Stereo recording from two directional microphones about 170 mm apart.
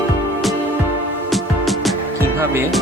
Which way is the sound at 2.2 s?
15° right (ahead or behind).